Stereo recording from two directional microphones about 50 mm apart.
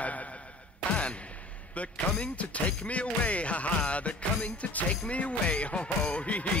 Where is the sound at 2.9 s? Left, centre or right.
Left.